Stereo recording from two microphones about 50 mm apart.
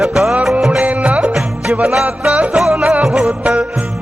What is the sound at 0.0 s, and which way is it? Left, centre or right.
Music, centre.